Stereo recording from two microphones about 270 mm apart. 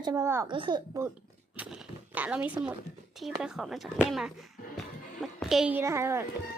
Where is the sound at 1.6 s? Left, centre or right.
Centre.